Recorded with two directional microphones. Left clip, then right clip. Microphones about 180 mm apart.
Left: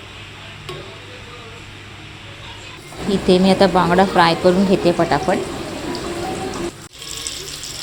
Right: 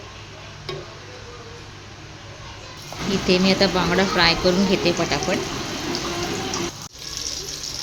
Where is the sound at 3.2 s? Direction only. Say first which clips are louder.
Left 5 dB; 20° left (ahead or behind).